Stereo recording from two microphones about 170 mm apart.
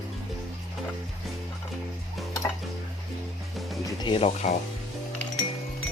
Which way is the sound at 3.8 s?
30° left (ahead or behind).